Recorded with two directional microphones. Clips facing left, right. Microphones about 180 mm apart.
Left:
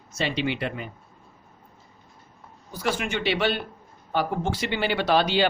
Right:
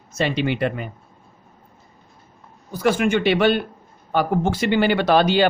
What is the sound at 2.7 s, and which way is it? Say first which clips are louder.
Speech: right 9 dB; 50° right (ahead or behind).